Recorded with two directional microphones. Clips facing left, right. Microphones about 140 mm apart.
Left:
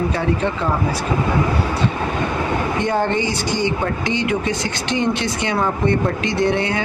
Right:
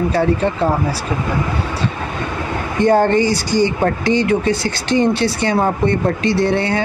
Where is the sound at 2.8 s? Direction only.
40° right (ahead or behind).